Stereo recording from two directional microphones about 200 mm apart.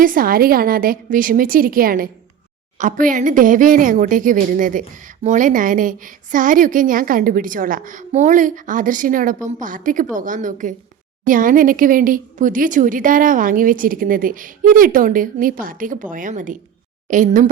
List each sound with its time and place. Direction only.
0.0 s speech: 45° right (ahead or behind)